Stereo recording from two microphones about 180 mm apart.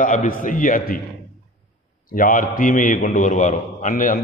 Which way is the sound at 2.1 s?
50° left (ahead or behind).